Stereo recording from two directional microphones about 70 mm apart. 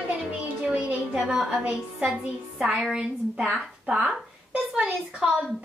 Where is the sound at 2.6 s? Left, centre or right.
Centre.